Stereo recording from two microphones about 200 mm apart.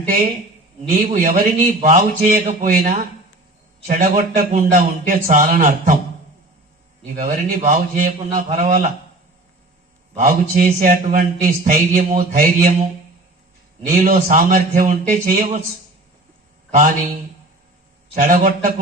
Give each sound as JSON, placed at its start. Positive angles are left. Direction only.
{"t": 0.9, "sound": "a man's voice", "side_deg": -40}
{"t": 7.2, "sound": "a man's voice", "side_deg": -45}
{"t": 10.2, "sound": "a man's voice", "side_deg": -45}
{"t": 18.1, "sound": "a man's voice", "side_deg": -40}